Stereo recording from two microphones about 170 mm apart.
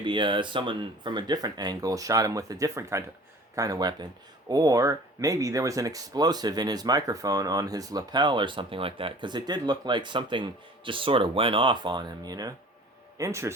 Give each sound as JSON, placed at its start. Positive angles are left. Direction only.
{"t": 0.0, "sound": "speech", "side_deg": -30}